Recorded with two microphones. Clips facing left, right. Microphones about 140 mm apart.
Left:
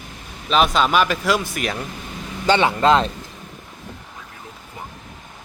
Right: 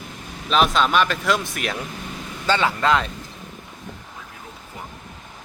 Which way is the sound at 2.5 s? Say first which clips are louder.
Left 4 dB; 25° left (ahead or behind).